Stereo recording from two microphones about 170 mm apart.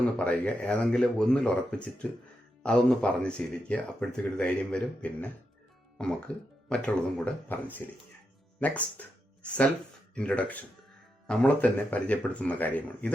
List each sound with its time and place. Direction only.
0.2 s speech: 5° left (ahead or behind)